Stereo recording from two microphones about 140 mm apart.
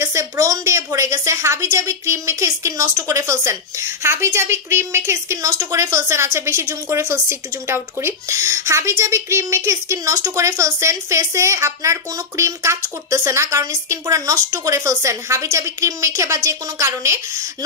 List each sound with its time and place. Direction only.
0.0 s a woman's voice: 20° right (ahead or behind)